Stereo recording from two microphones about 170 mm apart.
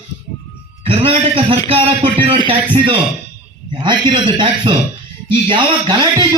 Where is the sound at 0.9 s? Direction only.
35° right (ahead or behind).